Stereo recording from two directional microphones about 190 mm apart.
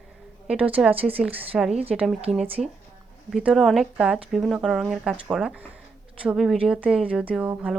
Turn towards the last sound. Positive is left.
turn(degrees=-5)  # may be behind; listen again after turning